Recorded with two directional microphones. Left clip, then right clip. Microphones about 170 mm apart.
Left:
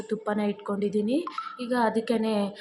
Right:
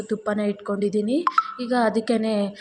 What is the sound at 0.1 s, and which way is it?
A woman's voice, 15° right (ahead or behind).